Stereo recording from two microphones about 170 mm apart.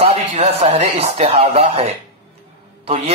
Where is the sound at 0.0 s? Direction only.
40° right (ahead or behind).